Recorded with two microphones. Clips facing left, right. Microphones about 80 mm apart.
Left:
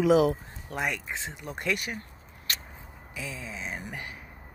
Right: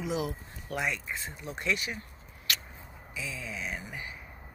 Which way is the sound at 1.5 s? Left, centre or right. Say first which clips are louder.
Left 1 dB; left.